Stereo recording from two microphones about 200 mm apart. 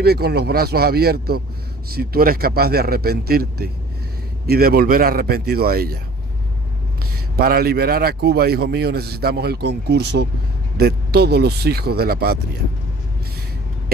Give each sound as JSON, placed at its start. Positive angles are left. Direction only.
{"t": 0.0, "sound": "a man's voice", "side_deg": -55}
{"t": 7.3, "sound": "a man's voice", "side_deg": -50}